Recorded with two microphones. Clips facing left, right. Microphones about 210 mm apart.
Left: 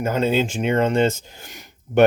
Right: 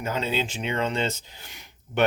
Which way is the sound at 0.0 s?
50° left (ahead or behind).